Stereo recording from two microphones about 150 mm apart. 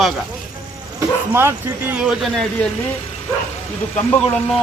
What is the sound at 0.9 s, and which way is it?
Speech, 15° right (ahead or behind).